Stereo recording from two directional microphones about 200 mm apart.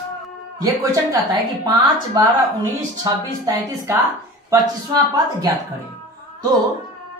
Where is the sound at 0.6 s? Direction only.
15° right (ahead or behind).